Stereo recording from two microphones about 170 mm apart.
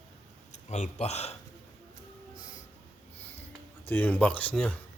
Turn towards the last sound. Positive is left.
turn(degrees=10)  # may be behind; listen again after turning